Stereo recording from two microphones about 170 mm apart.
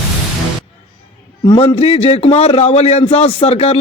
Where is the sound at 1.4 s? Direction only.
30° left (ahead or behind).